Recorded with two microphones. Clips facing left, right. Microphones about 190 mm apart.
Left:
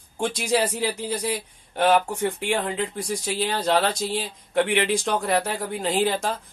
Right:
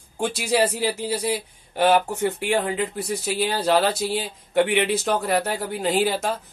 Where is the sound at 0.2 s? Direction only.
10° right (ahead or behind).